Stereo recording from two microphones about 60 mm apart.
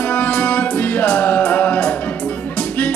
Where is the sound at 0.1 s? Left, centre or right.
Left.